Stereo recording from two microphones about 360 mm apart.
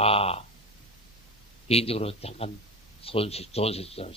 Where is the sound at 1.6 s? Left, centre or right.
Centre.